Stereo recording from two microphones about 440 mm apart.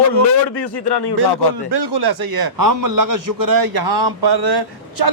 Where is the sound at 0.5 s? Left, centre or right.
Left.